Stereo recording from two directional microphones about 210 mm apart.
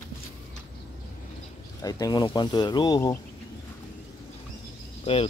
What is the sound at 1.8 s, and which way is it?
Speech, 15° left (ahead or behind).